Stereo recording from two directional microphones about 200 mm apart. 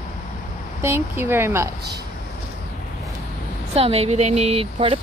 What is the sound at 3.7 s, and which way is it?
Speech, 30° right (ahead or behind).